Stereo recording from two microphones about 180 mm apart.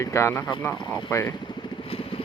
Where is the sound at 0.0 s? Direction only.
15° left (ahead or behind).